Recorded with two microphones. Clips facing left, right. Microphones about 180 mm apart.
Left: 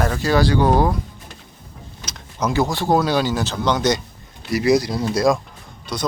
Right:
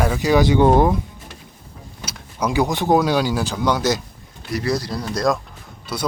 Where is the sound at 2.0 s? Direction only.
10° right (ahead or behind).